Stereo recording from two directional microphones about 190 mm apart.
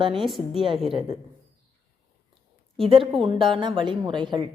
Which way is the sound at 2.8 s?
30° right (ahead or behind).